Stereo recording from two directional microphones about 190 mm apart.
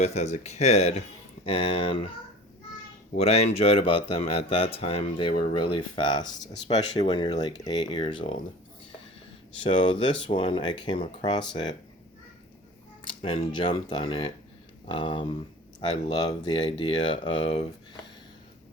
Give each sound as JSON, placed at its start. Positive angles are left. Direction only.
{"t": 0.0, "sound": "speech", "side_deg": 35}
{"t": 3.2, "sound": "speech", "side_deg": 35}
{"t": 6.7, "sound": "speech", "side_deg": 35}
{"t": 9.6, "sound": "speech", "side_deg": 25}
{"t": 13.5, "sound": "speech", "side_deg": 25}